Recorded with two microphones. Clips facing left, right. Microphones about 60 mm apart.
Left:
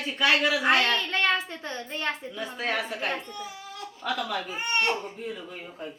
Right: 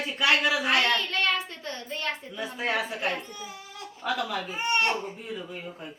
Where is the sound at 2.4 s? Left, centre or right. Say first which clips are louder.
Right 2 dB; centre.